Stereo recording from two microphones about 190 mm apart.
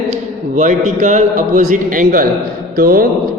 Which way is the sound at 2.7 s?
50° right (ahead or behind).